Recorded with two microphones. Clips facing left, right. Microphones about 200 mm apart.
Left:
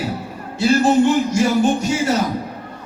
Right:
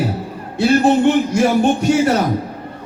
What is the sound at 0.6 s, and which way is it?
A man's voice, 60° right (ahead or behind).